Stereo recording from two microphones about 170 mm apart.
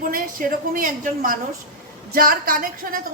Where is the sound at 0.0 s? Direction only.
55° right (ahead or behind).